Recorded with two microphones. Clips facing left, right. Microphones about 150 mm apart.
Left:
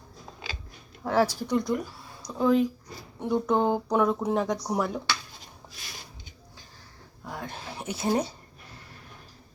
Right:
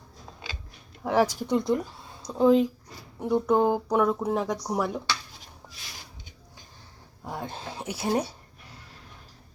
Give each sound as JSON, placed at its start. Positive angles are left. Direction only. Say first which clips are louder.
{"t": 1.0, "sound": "speech", "louder": "right 1 dB", "side_deg": -15}
{"t": 3.2, "sound": "speech", "louder": "right 2 dB", "side_deg": -10}
{"t": 7.3, "sound": "speech", "louder": "right 2 dB", "side_deg": -20}